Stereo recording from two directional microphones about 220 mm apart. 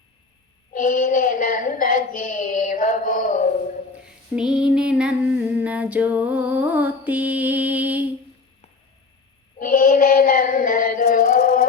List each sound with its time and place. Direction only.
0.8 s speech: 40° left (ahead or behind)
4.4 s music: 5° right (ahead or behind)
9.6 s child singing: 40° left (ahead or behind)